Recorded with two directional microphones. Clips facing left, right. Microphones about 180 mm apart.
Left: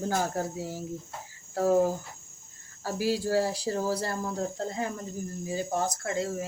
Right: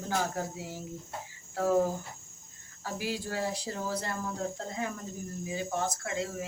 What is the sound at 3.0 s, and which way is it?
Speech, 35° left (ahead or behind).